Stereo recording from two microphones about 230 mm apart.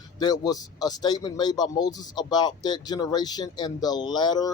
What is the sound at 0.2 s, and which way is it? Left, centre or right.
Speech, centre.